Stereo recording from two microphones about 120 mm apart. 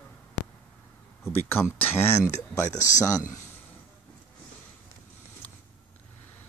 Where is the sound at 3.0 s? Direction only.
30° left (ahead or behind).